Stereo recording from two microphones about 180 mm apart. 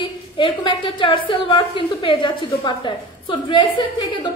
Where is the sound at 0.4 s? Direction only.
30° left (ahead or behind).